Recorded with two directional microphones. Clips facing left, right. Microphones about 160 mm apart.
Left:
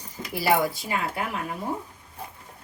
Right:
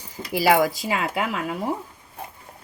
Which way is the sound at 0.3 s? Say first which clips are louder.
Right 4 dB; 90° right.